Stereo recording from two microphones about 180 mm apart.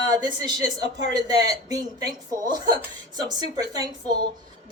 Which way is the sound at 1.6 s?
20° right (ahead or behind).